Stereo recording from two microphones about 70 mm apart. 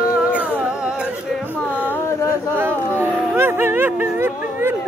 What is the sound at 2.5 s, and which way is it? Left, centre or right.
Music, right.